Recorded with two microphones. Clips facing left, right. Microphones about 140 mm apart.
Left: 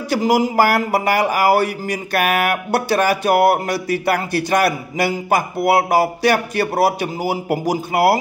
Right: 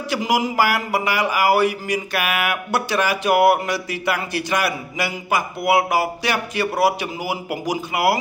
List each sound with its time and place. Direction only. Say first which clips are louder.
0.1 s speech: left 5 dB; 40° left (ahead or behind)